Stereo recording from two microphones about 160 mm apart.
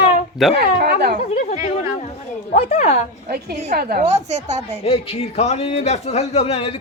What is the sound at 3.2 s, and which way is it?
Speech, 80° right.